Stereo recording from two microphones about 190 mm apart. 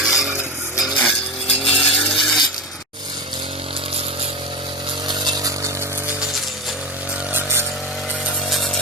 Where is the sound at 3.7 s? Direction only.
30° right (ahead or behind).